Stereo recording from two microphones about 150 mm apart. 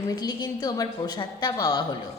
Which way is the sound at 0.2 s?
30° left (ahead or behind).